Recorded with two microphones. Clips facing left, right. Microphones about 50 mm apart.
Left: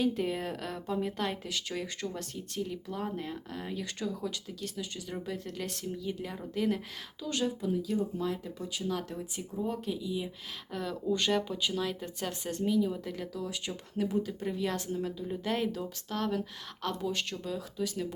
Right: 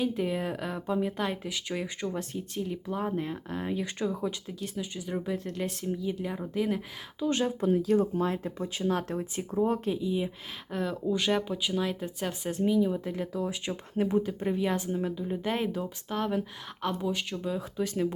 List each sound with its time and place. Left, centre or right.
0.2 s speech: centre
7.2 s speech: right
7.6 s speech: right
11.1 s speech: centre
16.8 s speech: centre
17.4 s speech: centre
17.8 s speech: right